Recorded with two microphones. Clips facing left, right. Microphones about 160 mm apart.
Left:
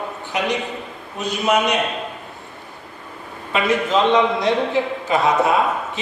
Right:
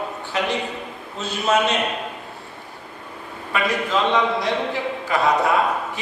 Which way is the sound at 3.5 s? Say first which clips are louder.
Left 4 dB; 20° left (ahead or behind).